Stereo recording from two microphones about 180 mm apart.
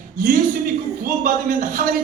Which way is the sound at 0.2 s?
55° right (ahead or behind).